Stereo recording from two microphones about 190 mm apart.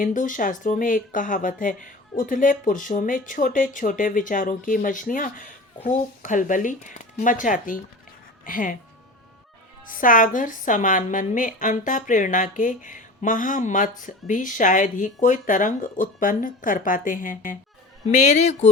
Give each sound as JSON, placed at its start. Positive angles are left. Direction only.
{"t": 0.0, "sound": "speech", "side_deg": 45}
{"t": 9.9, "sound": "speech", "side_deg": 45}